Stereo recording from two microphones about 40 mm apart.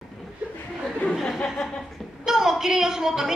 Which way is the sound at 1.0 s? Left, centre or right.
Left.